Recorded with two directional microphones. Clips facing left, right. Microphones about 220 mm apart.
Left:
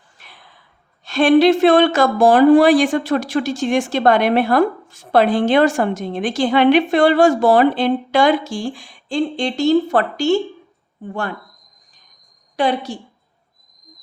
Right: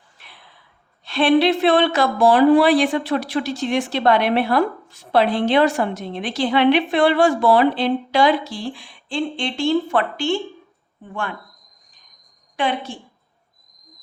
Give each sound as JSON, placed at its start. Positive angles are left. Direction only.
{"t": 0.2, "sound": "a sound", "side_deg": 45}
{"t": 1.0, "sound": "speech", "side_deg": 45}
{"t": 12.5, "sound": "a woman's voice", "side_deg": 40}